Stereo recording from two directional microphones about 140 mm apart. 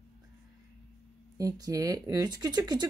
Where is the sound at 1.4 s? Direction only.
25° right (ahead or behind).